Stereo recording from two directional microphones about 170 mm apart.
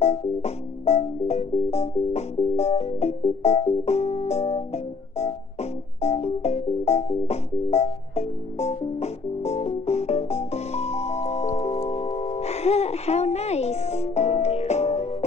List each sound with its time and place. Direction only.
0.0 s music: 40° left (ahead or behind)